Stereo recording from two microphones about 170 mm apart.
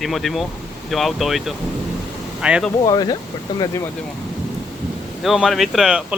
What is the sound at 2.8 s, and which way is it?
Speech, 20° left (ahead or behind).